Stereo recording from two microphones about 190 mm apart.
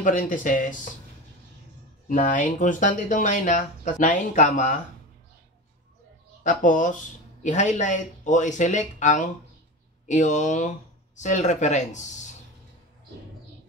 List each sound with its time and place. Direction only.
0.0 s speech: 45° left (ahead or behind)
2.0 s speech: 45° left (ahead or behind)
6.4 s speech: 45° left (ahead or behind)